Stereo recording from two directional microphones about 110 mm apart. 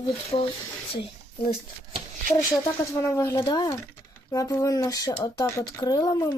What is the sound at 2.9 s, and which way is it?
Speech, 25° left (ahead or behind).